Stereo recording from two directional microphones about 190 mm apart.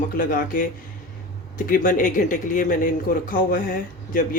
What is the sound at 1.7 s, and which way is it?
Speech, 45° left (ahead or behind).